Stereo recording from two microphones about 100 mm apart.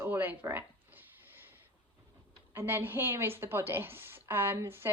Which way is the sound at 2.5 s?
20° right (ahead or behind).